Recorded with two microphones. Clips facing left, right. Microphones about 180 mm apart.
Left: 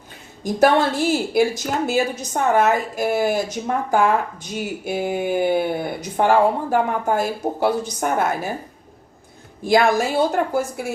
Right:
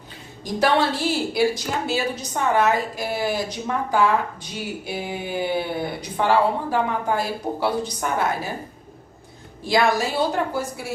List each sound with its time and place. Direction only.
0.4 s a woman's voice: 50° left (ahead or behind)
9.6 s a woman's voice: 50° left (ahead or behind)